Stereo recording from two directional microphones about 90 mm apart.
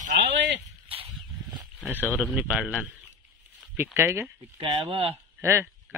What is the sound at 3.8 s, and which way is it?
Speech, 25° right (ahead or behind).